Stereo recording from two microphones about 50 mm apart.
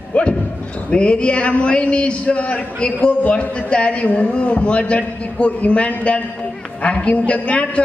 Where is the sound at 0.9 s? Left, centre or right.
Left.